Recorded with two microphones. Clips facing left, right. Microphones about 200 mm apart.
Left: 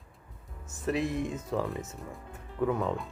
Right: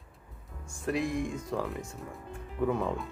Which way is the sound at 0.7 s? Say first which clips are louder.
Left 1 dB; 5° left (ahead or behind).